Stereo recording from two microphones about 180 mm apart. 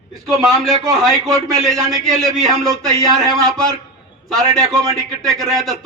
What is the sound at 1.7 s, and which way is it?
A man's voice, centre (ahead or behind).